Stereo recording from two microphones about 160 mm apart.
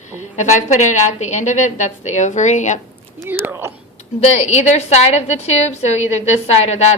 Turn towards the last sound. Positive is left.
turn(degrees=40)  # may be behind; listen again after turning